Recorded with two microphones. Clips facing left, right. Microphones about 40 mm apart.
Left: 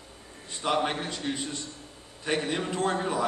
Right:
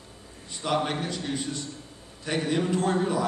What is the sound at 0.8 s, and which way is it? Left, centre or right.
A man's voice, left.